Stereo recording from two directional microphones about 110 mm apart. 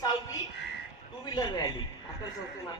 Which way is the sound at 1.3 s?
40° left (ahead or behind).